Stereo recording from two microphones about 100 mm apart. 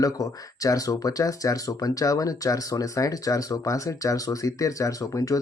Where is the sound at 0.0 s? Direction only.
35° left (ahead or behind).